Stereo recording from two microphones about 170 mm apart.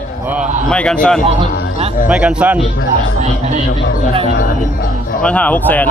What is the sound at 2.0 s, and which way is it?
Speech, 5° right (ahead or behind).